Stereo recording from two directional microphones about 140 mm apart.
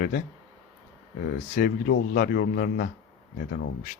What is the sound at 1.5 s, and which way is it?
Speech, 90° left.